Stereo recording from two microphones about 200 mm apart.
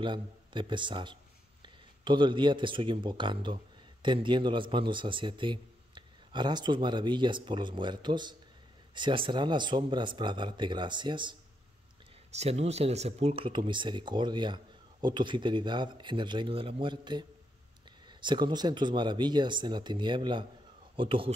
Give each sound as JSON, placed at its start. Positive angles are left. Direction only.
{"t": 0.0, "sound": "speech", "side_deg": -25}
{"t": 12.3, "sound": "speech", "side_deg": -35}